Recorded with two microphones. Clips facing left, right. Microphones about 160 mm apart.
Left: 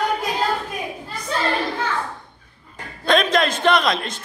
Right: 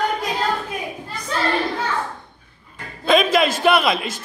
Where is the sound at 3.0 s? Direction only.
5° right (ahead or behind).